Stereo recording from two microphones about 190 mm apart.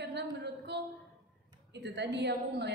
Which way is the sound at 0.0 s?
60° right (ahead or behind).